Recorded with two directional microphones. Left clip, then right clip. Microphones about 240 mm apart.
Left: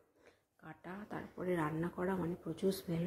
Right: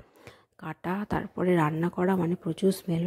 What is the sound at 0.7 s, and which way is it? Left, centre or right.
Speech, right.